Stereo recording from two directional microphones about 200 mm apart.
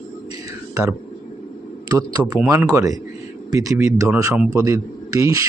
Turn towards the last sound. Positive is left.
turn(degrees=-15)  # may be behind; listen again after turning